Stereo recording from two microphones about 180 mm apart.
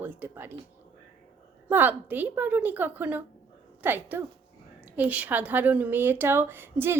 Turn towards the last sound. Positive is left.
turn(degrees=-10)  # may be behind; listen again after turning